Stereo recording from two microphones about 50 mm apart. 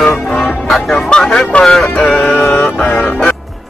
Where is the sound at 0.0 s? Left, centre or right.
Centre.